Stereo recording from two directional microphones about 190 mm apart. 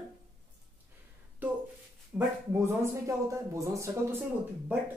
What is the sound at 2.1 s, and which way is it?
Speech, 15° right (ahead or behind).